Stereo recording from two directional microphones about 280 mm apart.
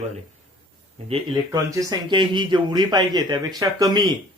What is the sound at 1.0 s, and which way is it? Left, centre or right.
Speech, centre.